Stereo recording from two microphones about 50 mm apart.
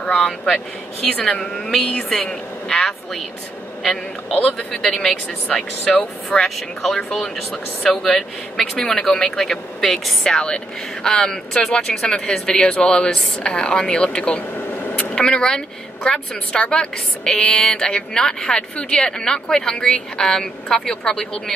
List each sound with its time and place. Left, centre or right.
0.0 s speech: left
1.0 s a woman's voice: centre